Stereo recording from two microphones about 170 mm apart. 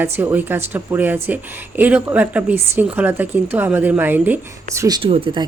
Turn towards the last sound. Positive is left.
turn(degrees=-30)  # may be behind; listen again after turning